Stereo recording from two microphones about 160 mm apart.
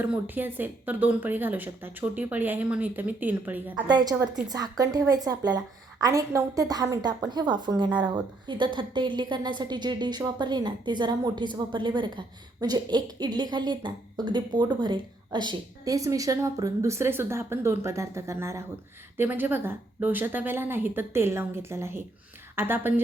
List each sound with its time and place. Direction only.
0.0 s a woman's voice: 10° right (ahead or behind)
3.8 s a woman's voice: 25° right (ahead or behind)